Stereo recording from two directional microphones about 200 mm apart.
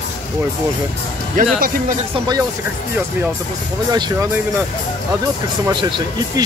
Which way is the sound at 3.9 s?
20° right (ahead or behind).